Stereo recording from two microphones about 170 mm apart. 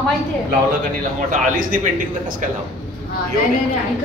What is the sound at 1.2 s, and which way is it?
Speech, 50° right (ahead or behind).